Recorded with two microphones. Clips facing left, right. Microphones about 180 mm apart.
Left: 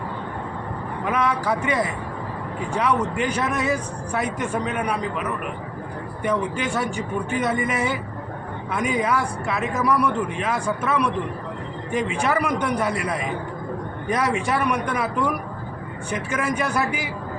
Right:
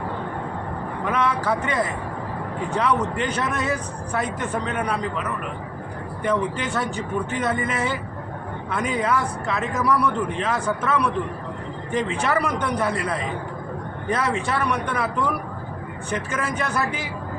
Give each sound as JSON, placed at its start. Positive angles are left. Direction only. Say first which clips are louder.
{"t": 1.0, "sound": "a man's voice", "louder": "even", "side_deg": 10}
{"t": 6.2, "sound": "a man's voice", "louder": "even", "side_deg": 10}
{"t": 16.0, "sound": "a man's voice", "louder": "left 2 dB", "side_deg": 10}